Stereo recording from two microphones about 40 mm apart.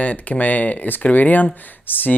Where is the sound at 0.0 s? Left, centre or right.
Left.